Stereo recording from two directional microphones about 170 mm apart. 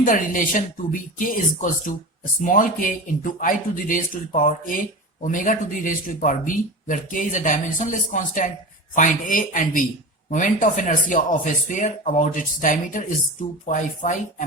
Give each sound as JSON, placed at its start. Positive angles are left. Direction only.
{"t": 0.0, "sound": "speech", "side_deg": 50}